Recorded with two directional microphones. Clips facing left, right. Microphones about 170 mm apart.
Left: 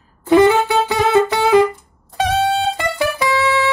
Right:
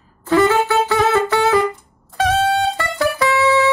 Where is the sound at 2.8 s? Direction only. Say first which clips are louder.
Even; 15° left (ahead or behind).